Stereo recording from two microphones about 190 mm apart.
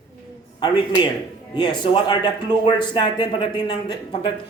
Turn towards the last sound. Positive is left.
turn(degrees=25)  # may be behind; listen again after turning